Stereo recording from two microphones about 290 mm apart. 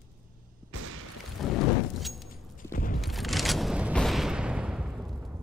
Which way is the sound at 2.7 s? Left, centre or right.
Left.